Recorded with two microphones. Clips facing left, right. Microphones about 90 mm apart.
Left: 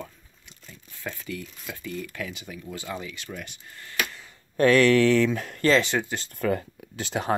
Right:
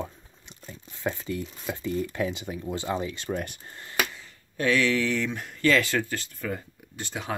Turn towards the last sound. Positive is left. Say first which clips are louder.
# left 5 dB
turn(degrees=85)